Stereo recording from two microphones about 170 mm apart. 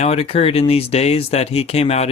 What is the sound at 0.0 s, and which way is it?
Speech, 35° left (ahead or behind).